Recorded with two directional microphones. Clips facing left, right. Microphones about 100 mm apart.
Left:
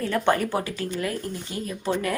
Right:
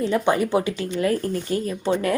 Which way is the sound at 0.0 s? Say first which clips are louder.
Right 2 dB; 15° right (ahead or behind).